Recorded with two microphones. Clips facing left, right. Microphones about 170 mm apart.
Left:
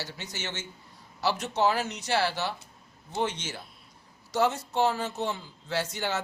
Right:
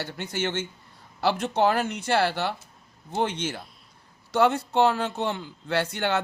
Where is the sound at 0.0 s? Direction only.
55° right (ahead or behind).